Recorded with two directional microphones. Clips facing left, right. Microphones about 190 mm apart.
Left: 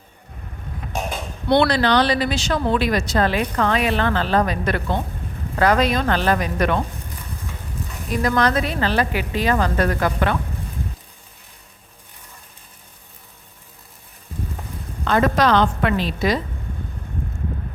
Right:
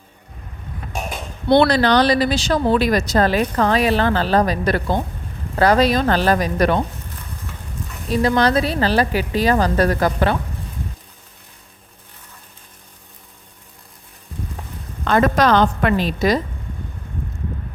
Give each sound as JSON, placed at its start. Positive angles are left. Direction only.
{"t": 1.5, "sound": "a woman's voice", "side_deg": -40}
{"t": 8.1, "sound": "a woman's voice", "side_deg": -30}
{"t": 15.0, "sound": "a woman's voice", "side_deg": -45}